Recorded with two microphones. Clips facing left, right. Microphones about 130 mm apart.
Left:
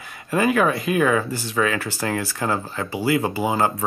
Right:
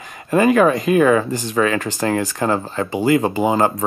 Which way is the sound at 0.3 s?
40° right (ahead or behind).